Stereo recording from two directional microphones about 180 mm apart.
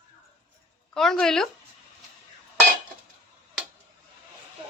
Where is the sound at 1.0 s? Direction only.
5° left (ahead or behind).